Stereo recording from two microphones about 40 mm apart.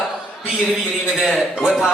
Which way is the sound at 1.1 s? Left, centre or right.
Centre.